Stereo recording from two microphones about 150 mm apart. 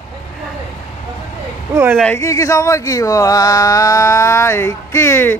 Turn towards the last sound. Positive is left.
turn(degrees=15)  # may be behind; listen again after turning